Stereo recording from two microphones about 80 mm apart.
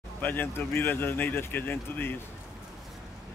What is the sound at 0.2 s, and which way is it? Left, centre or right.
Speech, left.